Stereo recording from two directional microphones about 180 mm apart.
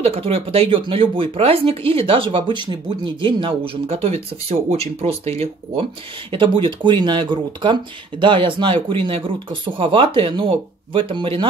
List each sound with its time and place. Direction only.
0.0 s speech: 35° right (ahead or behind)
6.3 s speech: 25° right (ahead or behind)